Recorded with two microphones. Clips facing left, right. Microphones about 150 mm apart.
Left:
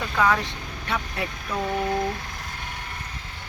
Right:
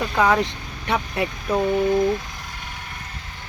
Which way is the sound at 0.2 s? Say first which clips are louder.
Right 3 dB; 20° right (ahead or behind).